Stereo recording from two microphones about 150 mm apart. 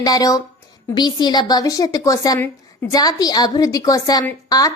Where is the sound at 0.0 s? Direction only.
25° left (ahead or behind).